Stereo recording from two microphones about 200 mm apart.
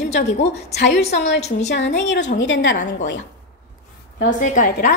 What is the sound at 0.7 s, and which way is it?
Speech, 60° left (ahead or behind).